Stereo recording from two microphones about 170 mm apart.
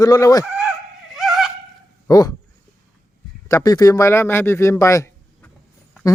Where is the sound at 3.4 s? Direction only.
20° left (ahead or behind).